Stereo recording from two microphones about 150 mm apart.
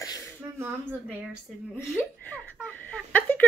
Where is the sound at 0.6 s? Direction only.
15° right (ahead or behind).